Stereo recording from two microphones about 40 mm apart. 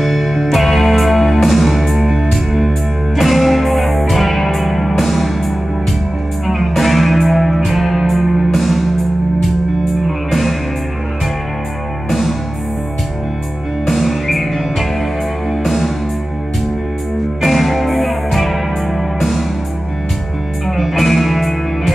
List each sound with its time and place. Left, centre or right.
0.0 s music: centre
10.0 s music: centre
12.1 s music: centre
13.8 s music: centre
17.4 s music: centre
20.6 s music: centre